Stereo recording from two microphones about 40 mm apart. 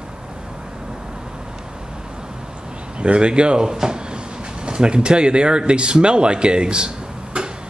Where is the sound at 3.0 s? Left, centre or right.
Right.